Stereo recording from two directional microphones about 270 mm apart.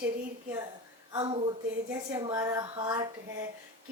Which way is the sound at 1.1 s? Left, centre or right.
Centre.